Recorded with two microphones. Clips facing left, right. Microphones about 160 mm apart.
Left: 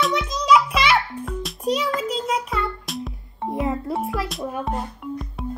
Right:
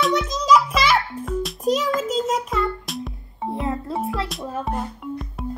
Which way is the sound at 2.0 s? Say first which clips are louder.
Right 3 dB; 45° right (ahead or behind).